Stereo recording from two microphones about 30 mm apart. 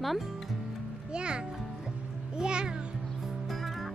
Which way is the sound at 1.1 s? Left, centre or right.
Right.